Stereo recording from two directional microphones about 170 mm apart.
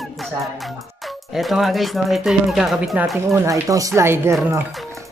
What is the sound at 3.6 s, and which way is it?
Speech, 20° right (ahead or behind).